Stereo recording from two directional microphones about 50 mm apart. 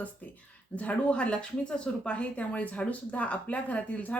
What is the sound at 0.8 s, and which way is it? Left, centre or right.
A woman's voice, left.